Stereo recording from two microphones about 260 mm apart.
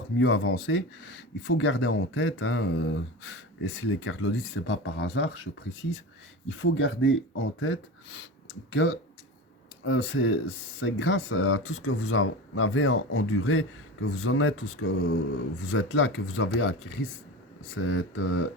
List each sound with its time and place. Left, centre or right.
0.2 s speech: left
6.6 s speech: left